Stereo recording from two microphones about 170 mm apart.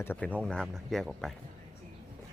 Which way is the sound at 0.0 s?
10° left (ahead or behind).